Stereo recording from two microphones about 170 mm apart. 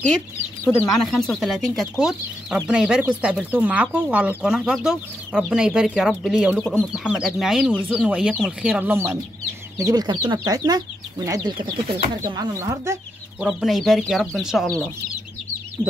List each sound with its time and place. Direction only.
1.0 s speech: 5° left (ahead or behind)
6.9 s speech: 5° right (ahead or behind)
13.4 s speech: 5° right (ahead or behind)